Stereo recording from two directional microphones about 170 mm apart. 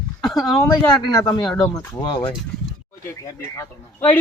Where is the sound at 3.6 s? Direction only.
10° left (ahead or behind).